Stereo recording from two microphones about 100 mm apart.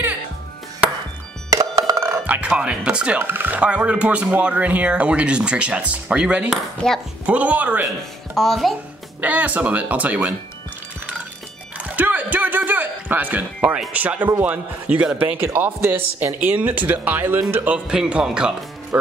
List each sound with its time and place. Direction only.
1.5 s music: 35° right (ahead or behind)
2.2 s speech: 15° right (ahead or behind)
3.2 s speech: 20° right (ahead or behind)
6.5 s speech: 5° left (ahead or behind)
7.2 s speech: 15° right (ahead or behind)
8.4 s speech: centre (ahead or behind)
9.2 s speech: 15° right (ahead or behind)
11.8 s a sound: 15° right (ahead or behind)
13.9 s speech: 15° right (ahead or behind)